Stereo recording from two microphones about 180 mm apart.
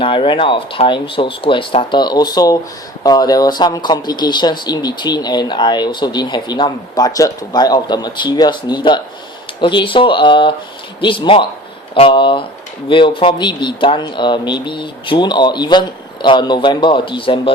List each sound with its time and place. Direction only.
0.0 s speech: 30° left (ahead or behind)